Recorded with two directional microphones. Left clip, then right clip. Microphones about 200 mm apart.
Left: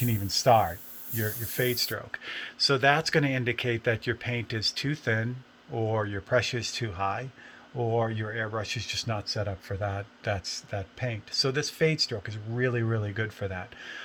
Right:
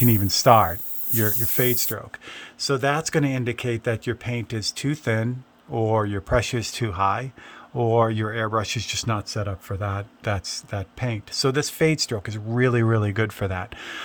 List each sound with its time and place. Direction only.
0.0 s speech: 40° right (ahead or behind)